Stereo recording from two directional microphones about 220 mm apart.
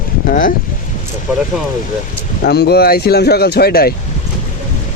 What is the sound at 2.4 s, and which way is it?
Speech, 45° left (ahead or behind).